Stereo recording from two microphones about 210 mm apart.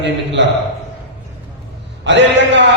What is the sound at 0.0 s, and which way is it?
Speech, 60° right (ahead or behind).